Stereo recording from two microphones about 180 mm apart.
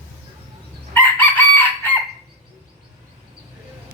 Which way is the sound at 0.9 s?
10° left (ahead or behind).